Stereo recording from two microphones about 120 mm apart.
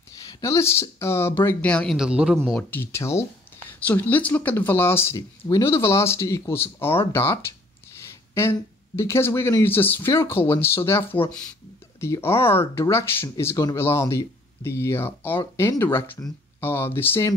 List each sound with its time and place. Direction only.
0.3 s speech: 25° left (ahead or behind); by 2.0 s 10° left (ahead or behind)
2.0 s a man's voice: 5° right (ahead or behind)
2.7 s speech: 20° left (ahead or behind)